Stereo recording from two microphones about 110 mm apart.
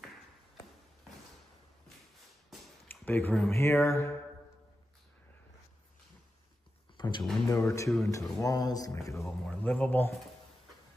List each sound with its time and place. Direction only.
2.9 s a sound: 20° left (ahead or behind)
3.4 s mantra: 25° left (ahead or behind)
7.0 s a sound: 45° left (ahead or behind)
7.4 s mantra: 25° left (ahead or behind)
8.0 s speech: 30° left (ahead or behind)
9.6 s speech: 15° left (ahead or behind)